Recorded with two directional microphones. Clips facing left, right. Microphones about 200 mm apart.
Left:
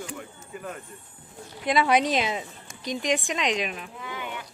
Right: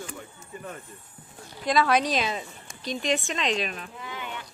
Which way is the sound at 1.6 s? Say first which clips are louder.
Left 1 dB; 20° left (ahead or behind).